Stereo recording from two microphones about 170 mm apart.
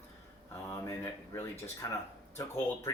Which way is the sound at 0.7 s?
20° left (ahead or behind).